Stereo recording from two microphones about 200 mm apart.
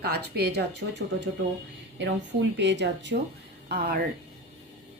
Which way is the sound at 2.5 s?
60° right (ahead or behind).